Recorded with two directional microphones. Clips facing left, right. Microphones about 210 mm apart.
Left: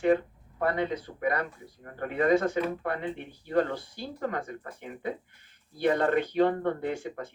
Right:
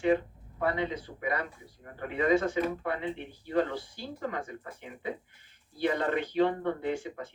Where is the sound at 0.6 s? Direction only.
50° left (ahead or behind).